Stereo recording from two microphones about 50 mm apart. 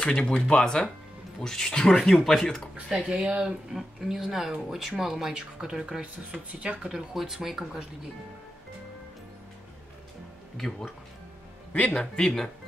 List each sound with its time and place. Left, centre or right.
0.0 s speech: centre
3.1 s speech: centre
11.7 s speech: left
12.0 s speech: centre